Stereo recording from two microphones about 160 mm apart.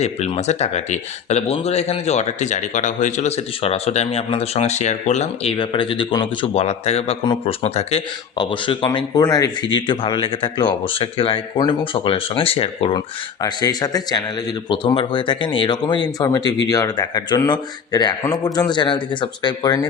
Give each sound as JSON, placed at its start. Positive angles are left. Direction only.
{"t": 0.0, "sound": "speech", "side_deg": 45}
{"t": 13.4, "sound": "speech", "side_deg": 25}